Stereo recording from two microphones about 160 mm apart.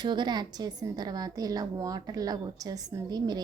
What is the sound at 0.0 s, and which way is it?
Speech, 25° right (ahead or behind).